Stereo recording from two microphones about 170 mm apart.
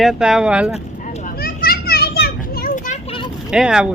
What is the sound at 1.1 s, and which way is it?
Children playing, 60° left (ahead or behind).